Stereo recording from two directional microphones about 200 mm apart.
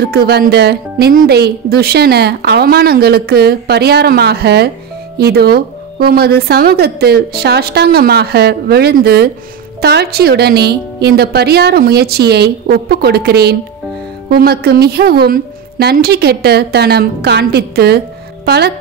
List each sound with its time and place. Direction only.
0.0 s a woman's voice: 50° right (ahead or behind)